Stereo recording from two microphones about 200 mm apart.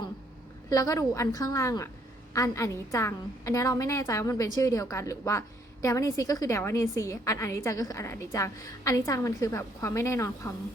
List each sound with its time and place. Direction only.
0.7 s a woman's voice: 15° left (ahead or behind)